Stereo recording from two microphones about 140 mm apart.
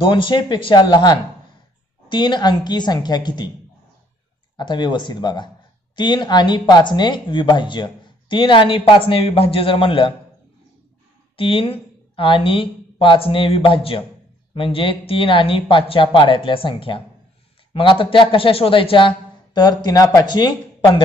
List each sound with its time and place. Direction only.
0.0 s speech: 35° left (ahead or behind)
4.6 s speech: 30° left (ahead or behind)
11.3 s a woman's voice: 40° left (ahead or behind)